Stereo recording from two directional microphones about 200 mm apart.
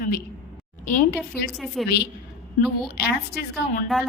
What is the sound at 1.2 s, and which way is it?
Speech, centre (ahead or behind).